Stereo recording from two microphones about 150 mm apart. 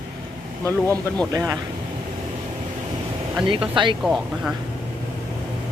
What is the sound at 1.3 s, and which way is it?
Speech, 25° right (ahead or behind).